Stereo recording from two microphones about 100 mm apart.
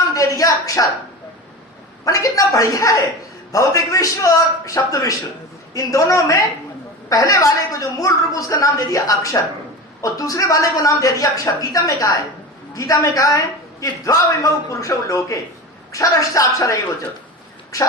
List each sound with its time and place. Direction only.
0.1 s a sound: 35° left (ahead or behind)
2.0 s a woman's voice: 35° left (ahead or behind)
17.7 s a woman's voice: 35° left (ahead or behind)